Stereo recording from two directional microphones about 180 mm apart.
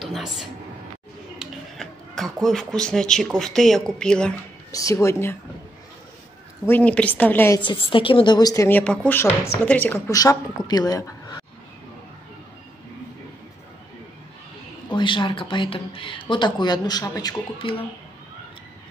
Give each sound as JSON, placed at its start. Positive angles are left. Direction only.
{"t": 0.0, "sound": "a woman's voice", "side_deg": 0}
{"t": 4.7, "sound": "speech", "side_deg": 15}
{"t": 6.7, "sound": "speech", "side_deg": 5}
{"t": 7.6, "sound": "speech", "side_deg": 30}
{"t": 14.9, "sound": "speech", "side_deg": 25}